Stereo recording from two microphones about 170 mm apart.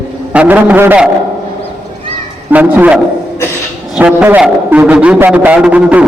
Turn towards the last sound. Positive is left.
turn(degrees=-5)  # may be behind; listen again after turning